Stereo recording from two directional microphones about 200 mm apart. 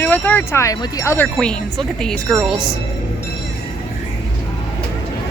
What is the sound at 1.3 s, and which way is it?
Speech, 5° left (ahead or behind).